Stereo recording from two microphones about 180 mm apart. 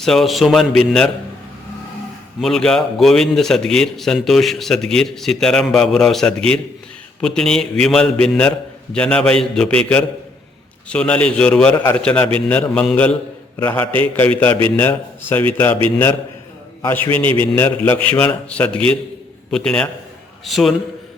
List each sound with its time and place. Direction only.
0.0 s a man's voice: centre (ahead or behind)
2.4 s a man's voice: 5° left (ahead or behind)
11.7 s a man's voice: 15° left (ahead or behind)
16.8 s a man's voice: 10° left (ahead or behind)
17.2 s a man's voice: 30° right (ahead or behind)
17.5 s a man's voice: 10° left (ahead or behind)